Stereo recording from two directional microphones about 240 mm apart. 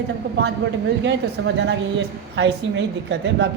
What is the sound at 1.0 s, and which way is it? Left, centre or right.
A woman's voice, right.